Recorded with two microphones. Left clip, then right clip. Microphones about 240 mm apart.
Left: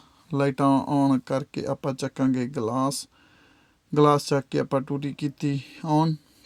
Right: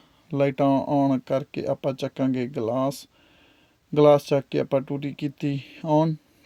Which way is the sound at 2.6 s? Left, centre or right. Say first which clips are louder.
Right 2 dB; left.